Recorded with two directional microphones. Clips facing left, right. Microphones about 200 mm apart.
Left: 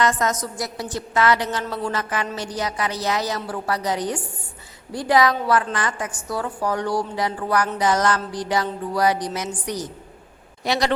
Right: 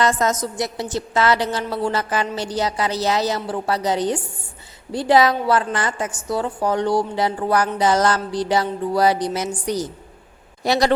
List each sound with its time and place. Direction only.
0.0 s a woman's voice: 30° right (ahead or behind)